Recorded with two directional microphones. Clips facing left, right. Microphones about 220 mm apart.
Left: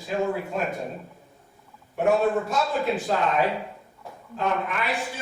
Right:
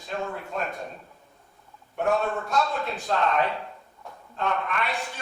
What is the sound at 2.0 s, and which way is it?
Speech, centre (ahead or behind).